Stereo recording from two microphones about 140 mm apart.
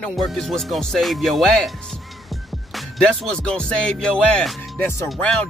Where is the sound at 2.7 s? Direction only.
5° left (ahead or behind).